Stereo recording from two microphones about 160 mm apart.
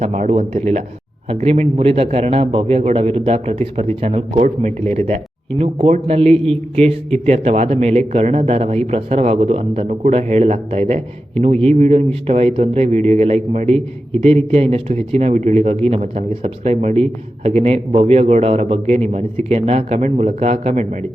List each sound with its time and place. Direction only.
0.0 s speech: 45° right (ahead or behind)